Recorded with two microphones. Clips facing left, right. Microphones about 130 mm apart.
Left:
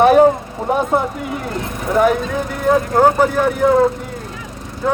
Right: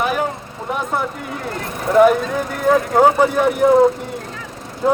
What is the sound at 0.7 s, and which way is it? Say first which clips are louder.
Speech: left 6 dB; 25° left (ahead or behind).